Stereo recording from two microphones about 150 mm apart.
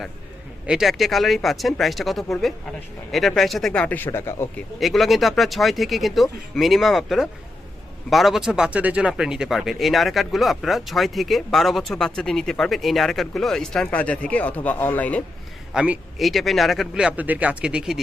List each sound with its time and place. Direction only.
0.7 s speech: centre (ahead or behind); by 4.6 s 15° left (ahead or behind)
4.8 s speech: centre (ahead or behind)
15.7 s speech: 5° right (ahead or behind)